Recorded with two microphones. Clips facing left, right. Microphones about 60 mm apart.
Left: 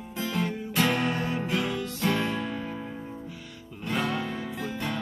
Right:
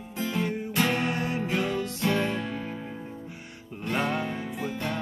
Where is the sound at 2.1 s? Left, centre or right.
Centre.